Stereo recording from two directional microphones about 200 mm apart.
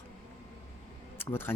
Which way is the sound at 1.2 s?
10° left (ahead or behind).